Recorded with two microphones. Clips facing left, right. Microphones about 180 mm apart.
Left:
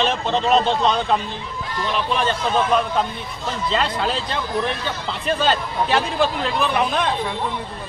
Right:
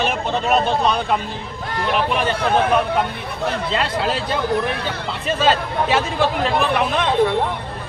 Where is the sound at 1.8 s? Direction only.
65° right (ahead or behind).